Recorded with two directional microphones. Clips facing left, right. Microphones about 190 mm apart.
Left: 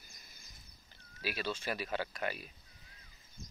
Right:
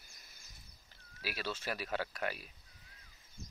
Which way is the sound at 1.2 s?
5° right (ahead or behind).